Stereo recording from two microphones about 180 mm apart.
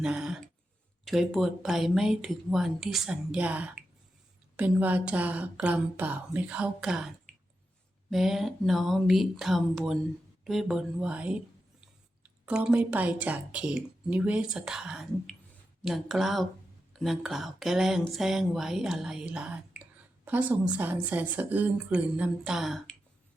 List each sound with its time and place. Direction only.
0.0 s speech: 5° right (ahead or behind)
8.1 s speech: centre (ahead or behind)